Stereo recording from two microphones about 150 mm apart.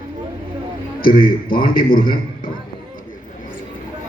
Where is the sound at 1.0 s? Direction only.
75° left (ahead or behind).